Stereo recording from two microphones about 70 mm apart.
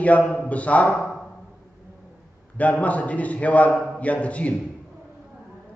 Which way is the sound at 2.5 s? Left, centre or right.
Centre.